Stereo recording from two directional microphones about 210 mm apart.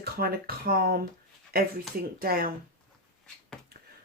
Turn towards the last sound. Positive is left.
turn(degrees=5)  # may be behind; listen again after turning